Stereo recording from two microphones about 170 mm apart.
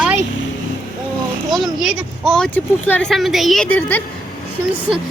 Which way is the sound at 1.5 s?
Centre (ahead or behind).